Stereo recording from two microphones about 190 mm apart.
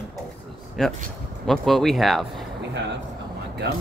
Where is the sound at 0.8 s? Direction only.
Centre (ahead or behind).